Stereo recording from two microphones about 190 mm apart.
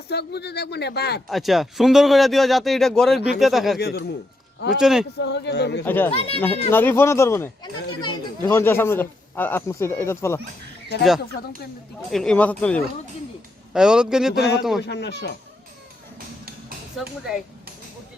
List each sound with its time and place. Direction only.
0.1 s speech: 60° left (ahead or behind)
1.3 s speech: centre (ahead or behind)
3.2 s speech: 60° left (ahead or behind)
3.4 s speech: centre (ahead or behind)
3.8 s speech: 55° left (ahead or behind)
4.8 s speech: 5° right (ahead or behind)
5.2 s speech: 65° left (ahead or behind)
5.8 s a man's voice: 10° left (ahead or behind)
6.1 s a child's voice: 30° left (ahead or behind)
6.7 s a man's voice: 10° left (ahead or behind)
8.4 s a man's voice: 10° left (ahead or behind)
12.1 s a man's voice: 5° left (ahead or behind)
13.7 s speech: 5° right (ahead or behind)
14.8 s speech: 60° left (ahead or behind)